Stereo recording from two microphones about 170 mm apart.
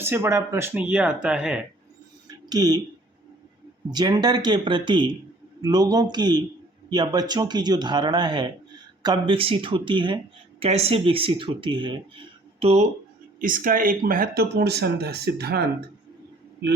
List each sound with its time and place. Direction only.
0.0 s speech: 15° right (ahead or behind)
2.5 s speech: 25° right (ahead or behind)
3.9 s speech: 25° right (ahead or behind)
13.4 s speech: 55° right (ahead or behind); by 15.6 s 70° right (ahead or behind)